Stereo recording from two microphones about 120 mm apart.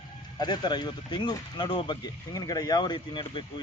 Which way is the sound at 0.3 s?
35° left (ahead or behind).